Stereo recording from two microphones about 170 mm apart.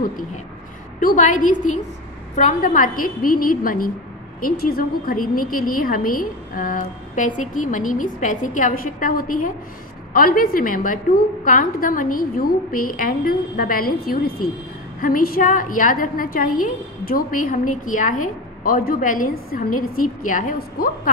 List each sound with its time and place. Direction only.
1.0 s a woman's voice: 50° left (ahead or behind)